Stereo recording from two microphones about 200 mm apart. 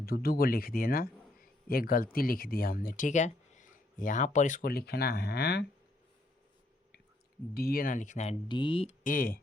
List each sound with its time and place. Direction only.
0.0 s speech: 50° left (ahead or behind)
7.5 s speech: 50° left (ahead or behind); by 9.0 s 25° left (ahead or behind)
9.0 s speech: 45° left (ahead or behind)